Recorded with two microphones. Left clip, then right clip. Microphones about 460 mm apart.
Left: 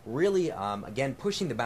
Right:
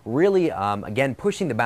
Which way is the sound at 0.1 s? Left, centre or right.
Right.